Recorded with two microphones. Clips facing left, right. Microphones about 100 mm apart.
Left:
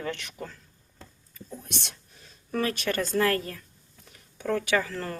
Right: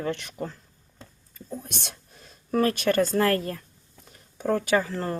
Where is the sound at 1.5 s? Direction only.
50° right (ahead or behind).